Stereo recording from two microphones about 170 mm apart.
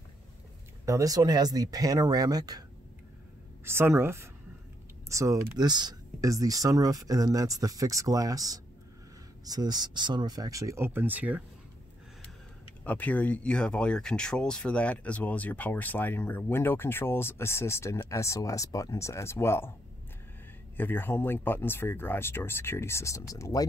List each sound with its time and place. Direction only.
0.8 s speech: 20° right (ahead or behind)
3.6 s speech: 15° right (ahead or behind)
12.8 s speech: 10° left (ahead or behind)
20.7 s speech: 10° left (ahead or behind)